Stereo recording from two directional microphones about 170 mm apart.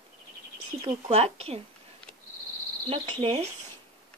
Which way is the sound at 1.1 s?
35° right (ahead or behind).